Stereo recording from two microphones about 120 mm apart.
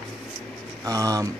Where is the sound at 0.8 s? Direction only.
30° right (ahead or behind).